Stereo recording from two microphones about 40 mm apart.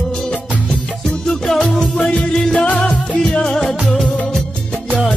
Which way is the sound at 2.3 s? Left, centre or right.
Centre.